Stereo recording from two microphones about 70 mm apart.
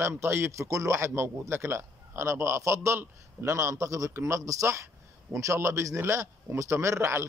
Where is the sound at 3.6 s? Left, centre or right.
Right.